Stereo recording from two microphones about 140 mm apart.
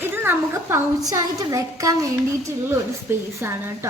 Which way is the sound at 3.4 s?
20° right (ahead or behind).